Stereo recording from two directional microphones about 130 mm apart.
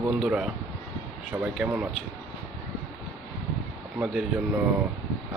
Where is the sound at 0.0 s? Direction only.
5° right (ahead or behind).